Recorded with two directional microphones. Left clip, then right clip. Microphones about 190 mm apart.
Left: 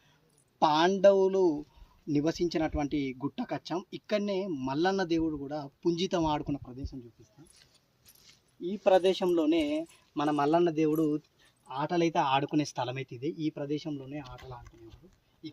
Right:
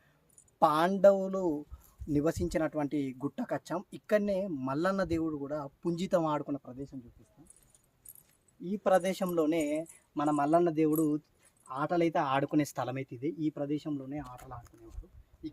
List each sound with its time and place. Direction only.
0.6 s speech: 20° right (ahead or behind)
8.8 s speech: 30° right (ahead or behind)
14.3 s speech: 5° right (ahead or behind)